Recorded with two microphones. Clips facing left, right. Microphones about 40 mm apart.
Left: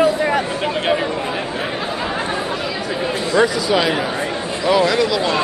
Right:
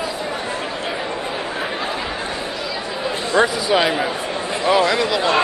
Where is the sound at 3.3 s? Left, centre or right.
Right.